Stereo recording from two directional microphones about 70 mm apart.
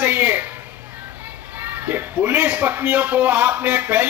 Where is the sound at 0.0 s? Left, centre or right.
Centre.